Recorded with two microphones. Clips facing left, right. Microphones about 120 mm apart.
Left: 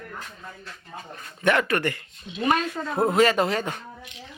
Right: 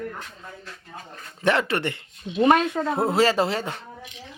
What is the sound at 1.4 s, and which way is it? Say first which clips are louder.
Speech: even; 30° right (ahead or behind).